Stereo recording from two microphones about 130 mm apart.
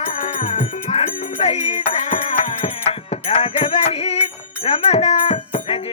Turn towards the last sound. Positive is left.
turn(degrees=45)  # may be behind; listen again after turning